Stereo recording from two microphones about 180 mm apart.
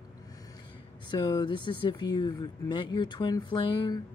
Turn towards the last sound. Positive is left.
turn(degrees=25)  # may be behind; listen again after turning